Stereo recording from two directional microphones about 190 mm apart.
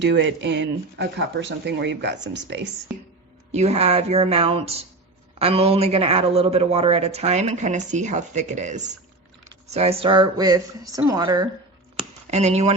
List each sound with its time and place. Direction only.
0.0 s speech: 70° right (ahead or behind)
3.5 s speech: 35° right (ahead or behind)
12.3 s speech: 35° right (ahead or behind)